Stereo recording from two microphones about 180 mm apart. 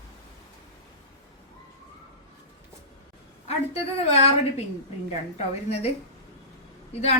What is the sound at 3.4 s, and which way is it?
Speech, 35° left (ahead or behind).